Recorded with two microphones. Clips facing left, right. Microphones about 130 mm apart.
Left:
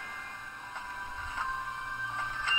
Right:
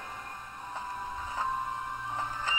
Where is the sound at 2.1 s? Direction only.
40° right (ahead or behind).